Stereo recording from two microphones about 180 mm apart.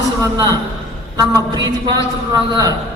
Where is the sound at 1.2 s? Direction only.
20° right (ahead or behind).